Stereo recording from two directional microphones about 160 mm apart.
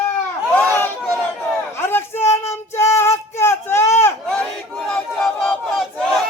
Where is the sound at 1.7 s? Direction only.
15° left (ahead or behind).